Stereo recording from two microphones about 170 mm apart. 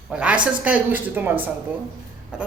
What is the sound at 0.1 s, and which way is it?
A man's voice, 5° right (ahead or behind).